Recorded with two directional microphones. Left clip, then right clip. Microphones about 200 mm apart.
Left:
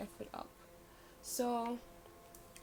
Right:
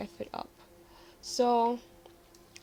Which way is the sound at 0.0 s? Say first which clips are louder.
Right 7 dB; 50° right (ahead or behind).